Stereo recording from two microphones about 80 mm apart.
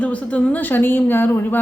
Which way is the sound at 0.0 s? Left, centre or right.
Centre.